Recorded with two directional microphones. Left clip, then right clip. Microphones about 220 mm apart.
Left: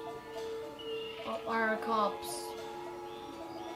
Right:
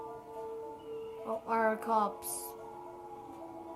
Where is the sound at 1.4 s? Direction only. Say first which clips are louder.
Right 1 dB; 20° right (ahead or behind).